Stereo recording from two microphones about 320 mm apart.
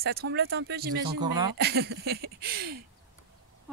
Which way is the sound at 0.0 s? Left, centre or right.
Right.